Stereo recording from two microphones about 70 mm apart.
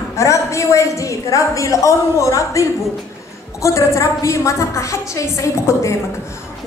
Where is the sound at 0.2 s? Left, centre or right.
Left.